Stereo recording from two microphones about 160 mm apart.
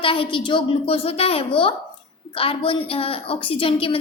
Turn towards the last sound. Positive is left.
turn(degrees=35)  # may be behind; listen again after turning